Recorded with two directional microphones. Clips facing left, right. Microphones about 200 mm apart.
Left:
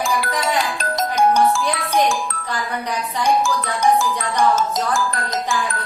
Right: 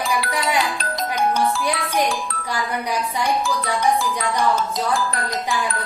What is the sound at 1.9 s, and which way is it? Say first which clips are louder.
Speech: left 3 dB; 40° left (ahead or behind).